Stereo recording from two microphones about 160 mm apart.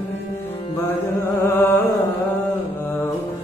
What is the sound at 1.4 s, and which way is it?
Music, 15° left (ahead or behind).